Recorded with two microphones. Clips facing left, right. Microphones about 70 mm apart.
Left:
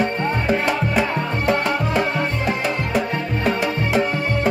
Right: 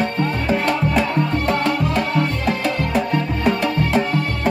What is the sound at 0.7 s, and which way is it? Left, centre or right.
Music, centre.